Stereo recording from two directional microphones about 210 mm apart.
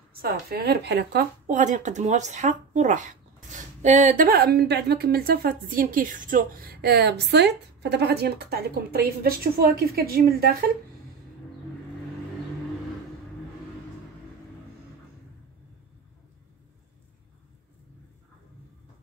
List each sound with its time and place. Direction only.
0.1 s a woman's voice: 45° right (ahead or behind)
1.5 s a woman's voice: 35° right (ahead or behind)